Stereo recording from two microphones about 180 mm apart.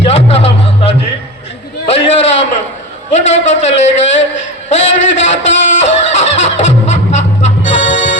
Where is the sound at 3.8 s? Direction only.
90° left.